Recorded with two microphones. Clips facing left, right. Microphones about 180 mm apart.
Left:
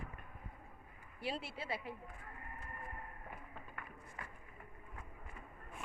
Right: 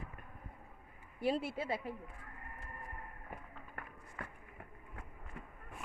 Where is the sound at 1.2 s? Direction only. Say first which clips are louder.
Right 8 dB; 50° right (ahead or behind).